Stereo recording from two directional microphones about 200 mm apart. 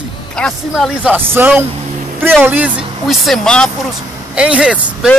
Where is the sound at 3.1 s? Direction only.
Centre (ahead or behind).